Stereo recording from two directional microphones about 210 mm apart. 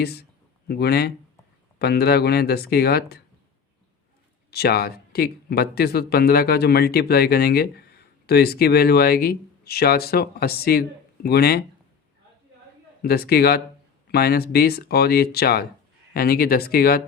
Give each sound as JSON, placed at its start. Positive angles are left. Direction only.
{"t": 0.0, "sound": "speech", "side_deg": 50}
{"t": 4.5, "sound": "speech", "side_deg": 50}
{"t": 13.0, "sound": "speech", "side_deg": 50}